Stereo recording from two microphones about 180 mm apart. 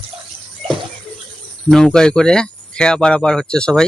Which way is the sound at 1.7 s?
5° left (ahead or behind).